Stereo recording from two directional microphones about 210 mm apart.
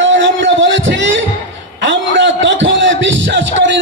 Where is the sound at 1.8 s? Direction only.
60° right (ahead or behind).